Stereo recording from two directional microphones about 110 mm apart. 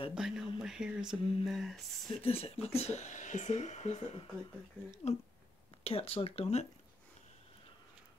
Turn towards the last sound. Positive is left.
turn(degrees=70)  # may be behind; listen again after turning